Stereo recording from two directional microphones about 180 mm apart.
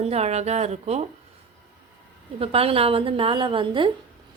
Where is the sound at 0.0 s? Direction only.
35° right (ahead or behind).